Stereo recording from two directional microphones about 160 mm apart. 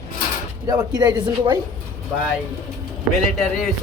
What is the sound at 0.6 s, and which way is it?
Speech, 25° right (ahead or behind).